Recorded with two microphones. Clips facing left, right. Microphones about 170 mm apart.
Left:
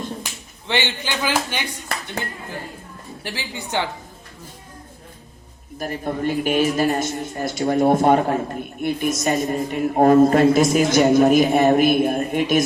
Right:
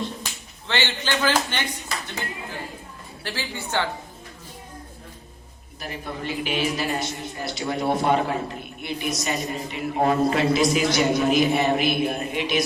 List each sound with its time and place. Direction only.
0.7 s speech: 15° left (ahead or behind)
3.2 s speech: 15° left (ahead or behind)
5.8 s a man's voice: 45° left (ahead or behind)